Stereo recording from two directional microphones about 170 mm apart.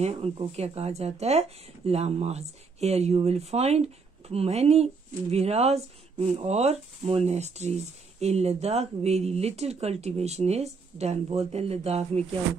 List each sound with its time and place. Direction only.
0.0 s speech: 35° right (ahead or behind)